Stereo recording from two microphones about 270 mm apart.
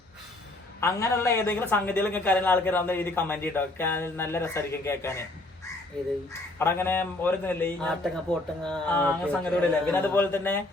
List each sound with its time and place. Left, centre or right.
0.8 s a man's voice: centre
6.6 s a man's voice: centre